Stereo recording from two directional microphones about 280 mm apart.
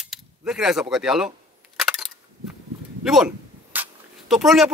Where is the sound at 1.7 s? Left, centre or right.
Centre.